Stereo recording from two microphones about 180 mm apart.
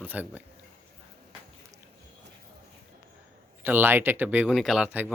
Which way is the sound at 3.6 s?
10° right (ahead or behind).